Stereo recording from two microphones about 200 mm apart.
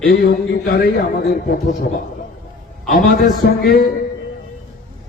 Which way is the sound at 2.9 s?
45° left (ahead or behind).